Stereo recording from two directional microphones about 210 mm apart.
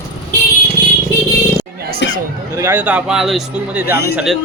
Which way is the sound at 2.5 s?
10° right (ahead or behind).